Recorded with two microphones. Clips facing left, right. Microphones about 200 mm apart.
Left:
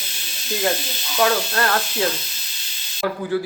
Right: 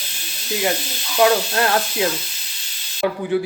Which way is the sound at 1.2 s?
15° right (ahead or behind).